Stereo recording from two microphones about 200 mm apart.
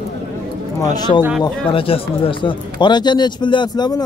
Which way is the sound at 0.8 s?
20° left (ahead or behind).